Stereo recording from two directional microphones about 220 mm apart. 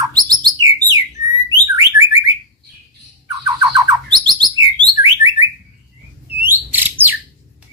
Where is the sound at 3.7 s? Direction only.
15° right (ahead or behind).